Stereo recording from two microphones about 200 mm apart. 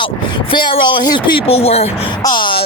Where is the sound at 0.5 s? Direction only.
25° left (ahead or behind).